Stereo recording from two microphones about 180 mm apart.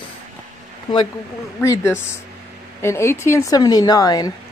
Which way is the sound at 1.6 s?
15° left (ahead or behind).